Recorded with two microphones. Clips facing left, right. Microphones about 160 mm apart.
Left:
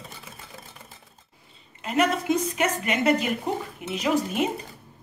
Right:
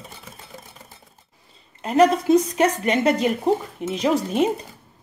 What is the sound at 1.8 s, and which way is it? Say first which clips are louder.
A woman's voice: right 7 dB; 35° right (ahead or behind).